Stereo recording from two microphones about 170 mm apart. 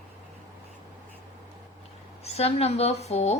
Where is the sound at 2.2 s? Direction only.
40° left (ahead or behind).